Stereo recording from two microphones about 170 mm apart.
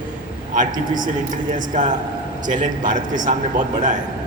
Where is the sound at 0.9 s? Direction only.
50° right (ahead or behind).